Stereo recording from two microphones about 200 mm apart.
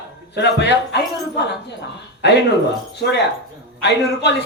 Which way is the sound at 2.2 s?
60° left (ahead or behind).